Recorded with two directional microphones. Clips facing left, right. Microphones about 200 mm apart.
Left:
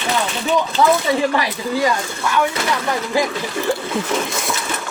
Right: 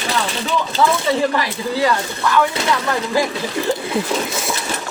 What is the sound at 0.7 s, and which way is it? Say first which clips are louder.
Speech: right 1 dB; 15° left (ahead or behind).